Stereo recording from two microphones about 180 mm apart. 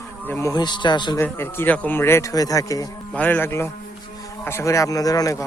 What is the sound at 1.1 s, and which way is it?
Speech, 15° left (ahead or behind).